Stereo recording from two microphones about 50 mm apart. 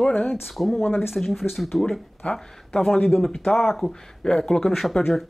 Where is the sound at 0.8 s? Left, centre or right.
Left.